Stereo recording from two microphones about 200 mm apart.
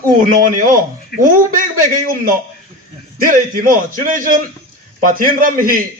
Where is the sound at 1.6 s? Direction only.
40° right (ahead or behind).